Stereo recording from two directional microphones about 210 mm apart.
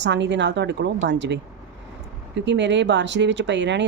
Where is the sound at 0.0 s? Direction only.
55° right (ahead or behind).